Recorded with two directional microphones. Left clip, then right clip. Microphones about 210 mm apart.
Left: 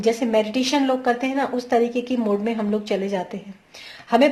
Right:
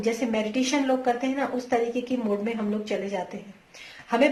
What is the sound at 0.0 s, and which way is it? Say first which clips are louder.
Speech: left 7 dB; 45° left (ahead or behind).